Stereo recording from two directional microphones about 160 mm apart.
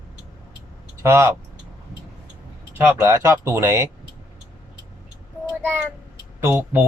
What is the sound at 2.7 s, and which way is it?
A man's voice, 15° right (ahead or behind).